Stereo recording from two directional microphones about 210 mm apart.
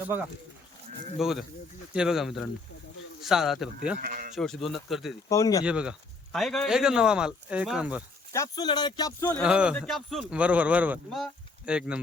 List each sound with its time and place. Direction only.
1.2 s a man's voice: centre (ahead or behind)
4.0 s speech: 45° right (ahead or behind)
4.4 s speech: centre (ahead or behind)
5.3 s speech: 15° left (ahead or behind)
5.6 s speech: 5° right (ahead or behind)
8.3 s speech: 15° left (ahead or behind)
9.4 s speech: 5° right (ahead or behind)